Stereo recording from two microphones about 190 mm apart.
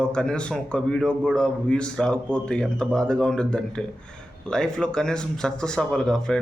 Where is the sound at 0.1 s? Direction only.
5° left (ahead or behind).